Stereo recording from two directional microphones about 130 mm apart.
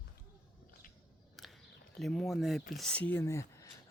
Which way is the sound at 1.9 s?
Centre (ahead or behind).